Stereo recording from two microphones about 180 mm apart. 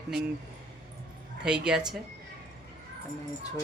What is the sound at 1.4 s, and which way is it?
Speech, 5° right (ahead or behind).